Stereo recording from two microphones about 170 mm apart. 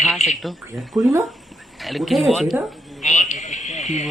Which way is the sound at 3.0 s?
45° left (ahead or behind).